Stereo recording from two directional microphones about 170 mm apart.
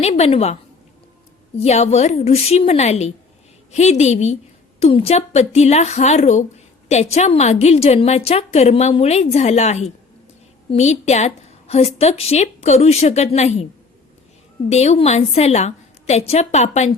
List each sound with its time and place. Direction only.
0.0 s a woman's voice: 40° left (ahead or behind)
1.5 s a woman's voice: 40° left (ahead or behind)
14.7 s a woman's voice: 40° left (ahead or behind)